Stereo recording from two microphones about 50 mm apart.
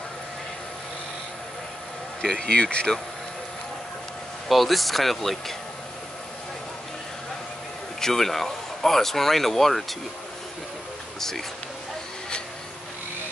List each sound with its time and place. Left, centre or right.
2.2 s speech: centre
2.5 s speech: left
4.5 s speech: centre
8.0 s speech: centre
11.1 s speech: centre